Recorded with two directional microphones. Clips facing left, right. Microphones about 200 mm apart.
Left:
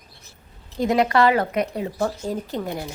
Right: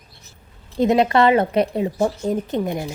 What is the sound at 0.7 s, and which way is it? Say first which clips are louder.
A woman's voice: right 3 dB; 25° right (ahead or behind).